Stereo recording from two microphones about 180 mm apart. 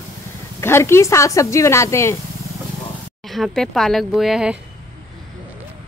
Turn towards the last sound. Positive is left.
turn(degrees=-5)  # may be behind; listen again after turning